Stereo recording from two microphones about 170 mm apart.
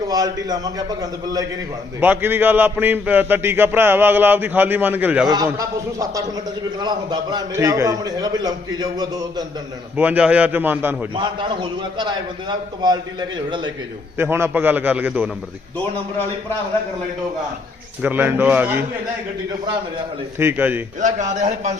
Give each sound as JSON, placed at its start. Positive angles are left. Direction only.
{"t": 0.1, "sound": "a man's voice", "side_deg": -20}
{"t": 2.0, "sound": "a man's voice", "side_deg": -10}
{"t": 5.3, "sound": "a man's voice", "side_deg": -20}
{"t": 10.0, "sound": "a man's voice", "side_deg": -10}
{"t": 11.1, "sound": "a man's voice", "side_deg": -25}
{"t": 14.2, "sound": "a man's voice", "side_deg": -15}
{"t": 18.0, "sound": "a man's voice", "side_deg": -10}
{"t": 20.4, "sound": "a man's voice", "side_deg": -10}
{"t": 21.0, "sound": "a man's voice", "side_deg": -45}